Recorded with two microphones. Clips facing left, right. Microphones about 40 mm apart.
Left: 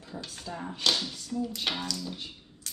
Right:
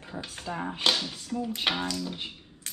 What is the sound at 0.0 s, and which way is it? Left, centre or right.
Speech, right.